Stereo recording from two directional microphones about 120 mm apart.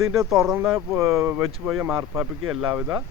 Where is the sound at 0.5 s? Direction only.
20° right (ahead or behind).